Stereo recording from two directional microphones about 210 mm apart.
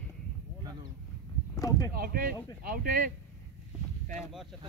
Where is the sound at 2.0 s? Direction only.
45° right (ahead or behind).